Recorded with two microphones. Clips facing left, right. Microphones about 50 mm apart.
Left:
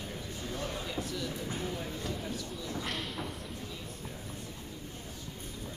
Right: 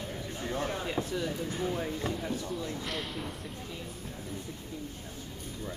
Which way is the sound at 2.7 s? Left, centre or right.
Centre.